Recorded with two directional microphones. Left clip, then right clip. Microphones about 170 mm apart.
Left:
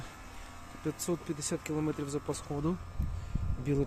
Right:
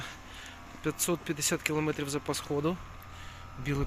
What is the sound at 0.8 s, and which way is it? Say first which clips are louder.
Speech: right 3 dB; 5° right (ahead or behind).